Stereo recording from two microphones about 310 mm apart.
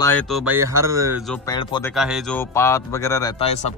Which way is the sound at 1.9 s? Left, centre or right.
Centre.